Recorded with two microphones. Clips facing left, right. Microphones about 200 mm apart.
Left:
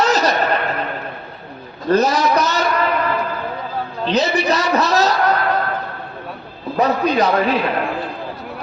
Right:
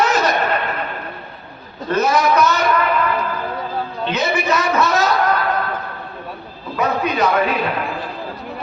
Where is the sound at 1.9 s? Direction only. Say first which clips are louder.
Left 1 dB; 35° left (ahead or behind).